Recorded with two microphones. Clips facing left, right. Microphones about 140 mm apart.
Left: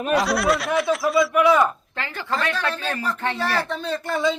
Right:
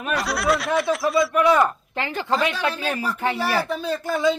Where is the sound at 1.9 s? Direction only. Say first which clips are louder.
Right 4 dB; 15° right (ahead or behind).